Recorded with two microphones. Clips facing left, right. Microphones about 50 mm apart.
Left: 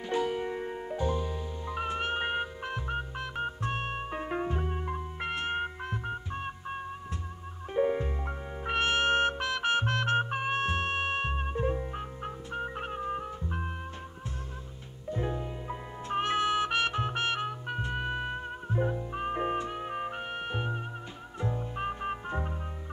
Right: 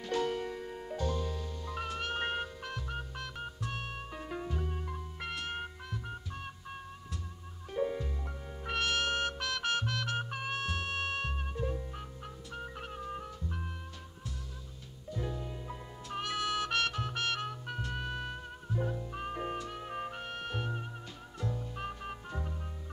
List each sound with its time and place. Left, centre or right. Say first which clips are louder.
0.0 s music: left 3 dB; centre
9.8 s music: left 7 dB; left
15.0 s music: left 6 dB; left